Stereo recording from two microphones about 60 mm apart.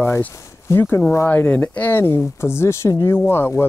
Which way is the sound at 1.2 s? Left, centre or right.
Left.